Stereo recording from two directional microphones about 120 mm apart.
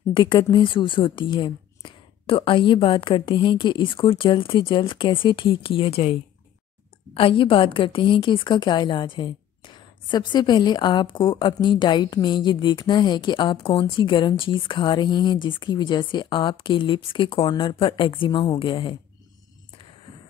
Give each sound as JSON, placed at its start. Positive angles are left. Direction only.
{"t": 0.1, "sound": "a woman's voice", "side_deg": 40}
{"t": 7.2, "sound": "a woman's voice", "side_deg": 50}